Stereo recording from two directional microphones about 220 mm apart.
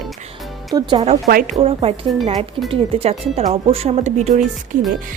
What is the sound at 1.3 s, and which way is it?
Speech, 40° right (ahead or behind).